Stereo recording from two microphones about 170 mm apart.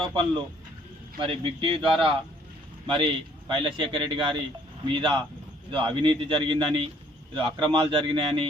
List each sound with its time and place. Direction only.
0.0 s a man's voice: 30° right (ahead or behind)